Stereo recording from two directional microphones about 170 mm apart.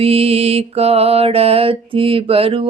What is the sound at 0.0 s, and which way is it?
Mantra, 35° right (ahead or behind).